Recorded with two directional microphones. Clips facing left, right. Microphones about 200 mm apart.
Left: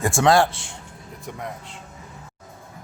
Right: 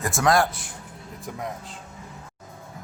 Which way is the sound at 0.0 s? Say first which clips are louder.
Left 4 dB; 25° left (ahead or behind).